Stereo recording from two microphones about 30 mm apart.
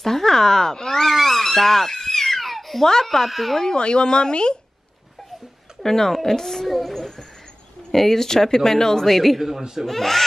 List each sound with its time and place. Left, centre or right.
0.0 s a sound: centre
1.1 s a sound: centre
1.4 s crying: centre
2.8 s speech: centre
3.3 s a man's voice: centre
3.7 s speech: left
5.8 s speech: centre
9.0 s a man's voice: centre
9.4 s speech: centre
9.8 s speech: centre